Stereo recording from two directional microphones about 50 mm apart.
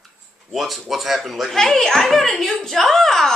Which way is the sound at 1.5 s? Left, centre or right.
Centre.